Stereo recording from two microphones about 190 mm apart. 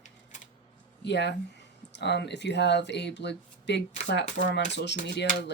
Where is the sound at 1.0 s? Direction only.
65° left (ahead or behind).